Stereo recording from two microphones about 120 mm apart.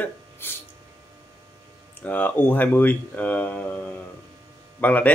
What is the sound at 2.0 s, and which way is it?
Speech, 15° left (ahead or behind).